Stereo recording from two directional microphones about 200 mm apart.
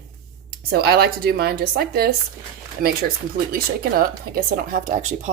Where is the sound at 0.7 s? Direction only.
50° right (ahead or behind).